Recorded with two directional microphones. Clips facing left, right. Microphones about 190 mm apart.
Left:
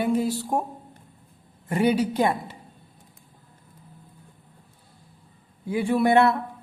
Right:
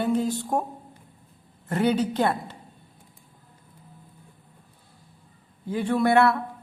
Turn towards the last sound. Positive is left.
turn(degrees=20)  # may be behind; listen again after turning